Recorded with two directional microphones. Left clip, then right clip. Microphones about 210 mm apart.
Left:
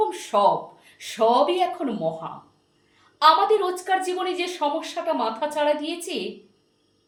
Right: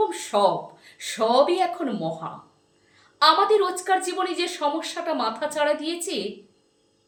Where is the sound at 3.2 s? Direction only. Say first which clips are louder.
Left 1 dB; 15° right (ahead or behind).